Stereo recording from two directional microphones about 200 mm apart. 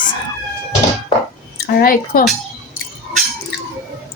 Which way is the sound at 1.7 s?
45° left (ahead or behind).